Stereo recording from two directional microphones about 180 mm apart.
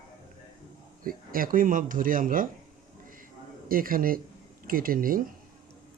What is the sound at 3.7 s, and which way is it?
A man's voice, 50° right (ahead or behind).